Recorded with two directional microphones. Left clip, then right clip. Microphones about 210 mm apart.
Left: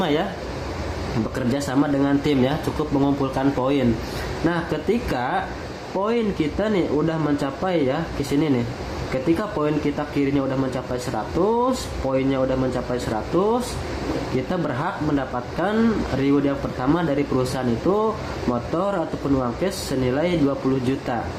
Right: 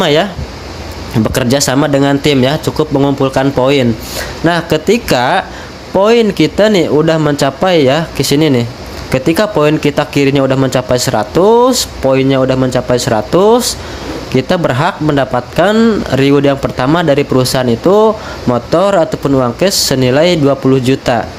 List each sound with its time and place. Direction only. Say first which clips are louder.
0.0 s speech: right 12 dB; 45° right (ahead or behind)
1.4 s speech: right 12 dB; 50° right (ahead or behind)